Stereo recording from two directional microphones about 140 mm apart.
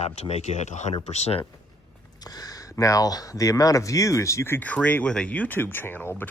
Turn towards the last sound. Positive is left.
turn(degrees=15)  # may be behind; listen again after turning